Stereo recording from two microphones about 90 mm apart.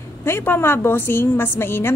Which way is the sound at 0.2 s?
25° left (ahead or behind).